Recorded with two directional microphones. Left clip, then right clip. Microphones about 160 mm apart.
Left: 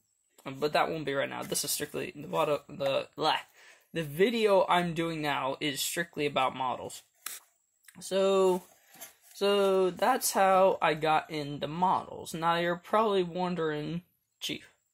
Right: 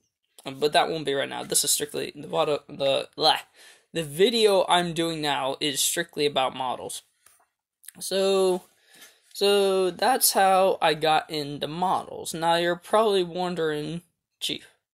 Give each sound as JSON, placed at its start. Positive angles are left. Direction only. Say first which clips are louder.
{"t": 0.4, "sound": "speech", "louder": "right 6 dB", "side_deg": -40}